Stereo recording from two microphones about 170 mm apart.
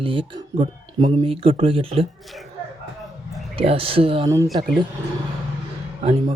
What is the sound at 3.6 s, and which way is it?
Speech, 35° right (ahead or behind).